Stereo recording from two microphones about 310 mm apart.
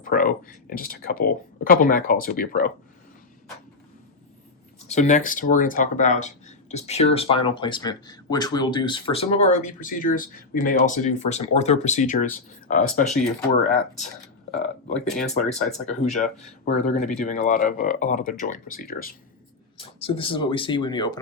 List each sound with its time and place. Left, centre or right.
0.0 s speech: left
4.9 s speech: left
14.9 s speech: centre
15.2 s speech: left
19.7 s speech: centre